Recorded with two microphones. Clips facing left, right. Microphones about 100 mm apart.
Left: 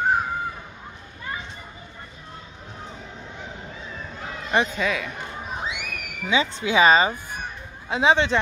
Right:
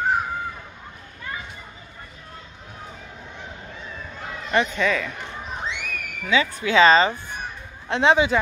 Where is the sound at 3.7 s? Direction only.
Centre (ahead or behind).